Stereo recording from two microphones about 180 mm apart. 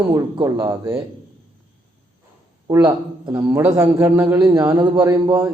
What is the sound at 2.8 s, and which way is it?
Speech, 25° right (ahead or behind).